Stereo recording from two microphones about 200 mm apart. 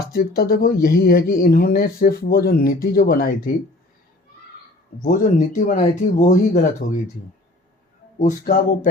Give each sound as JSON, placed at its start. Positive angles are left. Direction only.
{"t": 0.1, "sound": "speech", "side_deg": 50}
{"t": 5.0, "sound": "speech", "side_deg": 40}
{"t": 8.2, "sound": "speech", "side_deg": 40}